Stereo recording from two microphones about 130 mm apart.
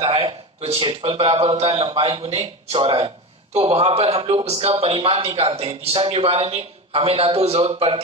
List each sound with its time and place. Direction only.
0.0 s a man's voice: 45° right (ahead or behind)